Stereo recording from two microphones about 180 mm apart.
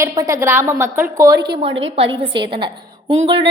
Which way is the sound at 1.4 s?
80° right.